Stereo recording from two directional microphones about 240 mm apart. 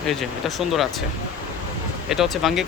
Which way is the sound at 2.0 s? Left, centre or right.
Centre.